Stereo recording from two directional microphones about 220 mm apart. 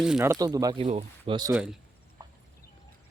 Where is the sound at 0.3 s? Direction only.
15° right (ahead or behind).